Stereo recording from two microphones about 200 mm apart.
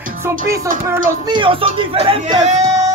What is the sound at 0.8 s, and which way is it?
Speech, 20° right (ahead or behind).